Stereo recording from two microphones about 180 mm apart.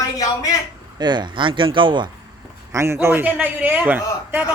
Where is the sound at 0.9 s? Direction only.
25° right (ahead or behind).